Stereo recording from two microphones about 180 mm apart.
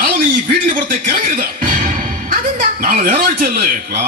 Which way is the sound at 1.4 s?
45° right (ahead or behind).